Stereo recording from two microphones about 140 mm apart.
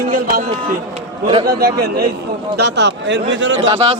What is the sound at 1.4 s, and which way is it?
Speech, 90° right.